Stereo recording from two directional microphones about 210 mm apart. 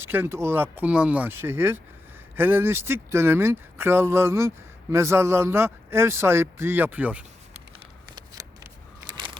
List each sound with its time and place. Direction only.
0.0 s speech: 10° right (ahead or behind)
8.1 s shuffling cards: 15° right (ahead or behind)